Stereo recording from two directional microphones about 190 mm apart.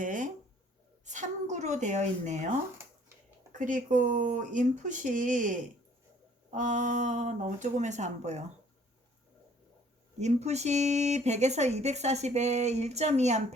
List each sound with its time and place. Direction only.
0.0 s a sound: 45° right (ahead or behind)
1.0 s speech: 40° right (ahead or behind)
10.2 s speech: 35° right (ahead or behind)